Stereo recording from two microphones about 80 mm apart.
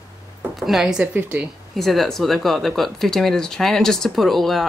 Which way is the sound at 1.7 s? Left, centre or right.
Centre.